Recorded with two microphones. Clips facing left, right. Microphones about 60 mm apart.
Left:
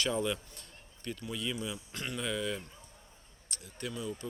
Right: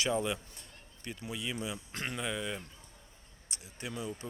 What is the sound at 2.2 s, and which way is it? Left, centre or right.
Speech, centre.